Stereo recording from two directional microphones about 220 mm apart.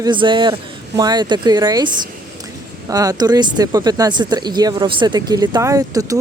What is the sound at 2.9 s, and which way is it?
Speech, 15° right (ahead or behind).